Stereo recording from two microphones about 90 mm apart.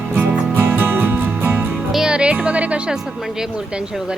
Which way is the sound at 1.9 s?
5° right (ahead or behind).